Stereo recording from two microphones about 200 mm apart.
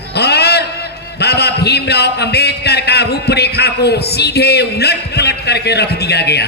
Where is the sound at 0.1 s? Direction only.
55° left (ahead or behind).